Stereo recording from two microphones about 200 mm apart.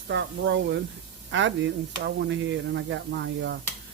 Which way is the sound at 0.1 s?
65° right (ahead or behind).